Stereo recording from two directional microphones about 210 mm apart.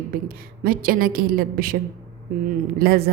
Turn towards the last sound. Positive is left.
turn(degrees=-50)  # may be behind; listen again after turning